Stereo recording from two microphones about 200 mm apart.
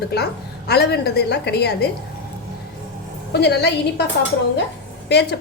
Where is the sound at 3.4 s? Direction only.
55° left (ahead or behind).